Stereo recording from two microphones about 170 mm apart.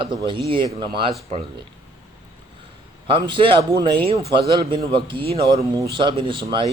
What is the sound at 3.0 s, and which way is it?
Speech, 30° right (ahead or behind).